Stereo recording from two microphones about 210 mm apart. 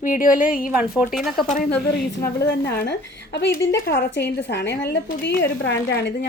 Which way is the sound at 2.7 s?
50° left (ahead or behind).